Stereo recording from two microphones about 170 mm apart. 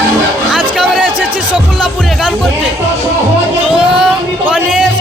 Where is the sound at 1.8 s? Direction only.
Centre (ahead or behind).